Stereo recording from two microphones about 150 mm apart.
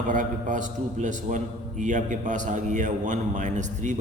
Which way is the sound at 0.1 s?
60° right (ahead or behind).